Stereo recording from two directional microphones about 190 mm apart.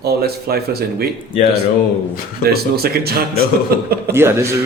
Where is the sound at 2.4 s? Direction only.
55° right (ahead or behind).